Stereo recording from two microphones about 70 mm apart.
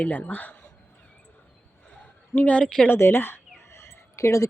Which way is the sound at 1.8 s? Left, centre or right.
Centre.